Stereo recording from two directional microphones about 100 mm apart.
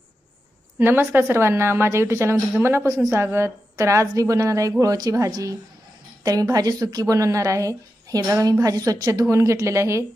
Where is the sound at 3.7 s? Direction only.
30° right (ahead or behind).